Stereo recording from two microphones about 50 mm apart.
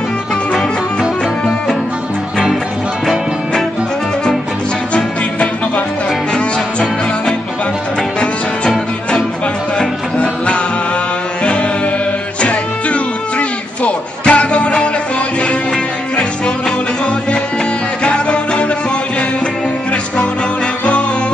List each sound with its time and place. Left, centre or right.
8.2 s music: centre
12.4 s music: left
18.0 s music: left